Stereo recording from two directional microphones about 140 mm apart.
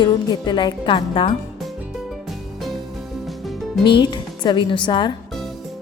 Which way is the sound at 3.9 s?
35° left (ahead or behind).